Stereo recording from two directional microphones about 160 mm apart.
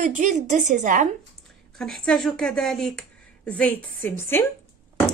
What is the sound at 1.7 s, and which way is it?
Speech, 5° left (ahead or behind).